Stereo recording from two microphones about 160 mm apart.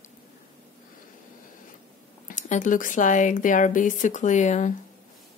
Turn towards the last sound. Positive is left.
turn(degrees=50)  # may be behind; listen again after turning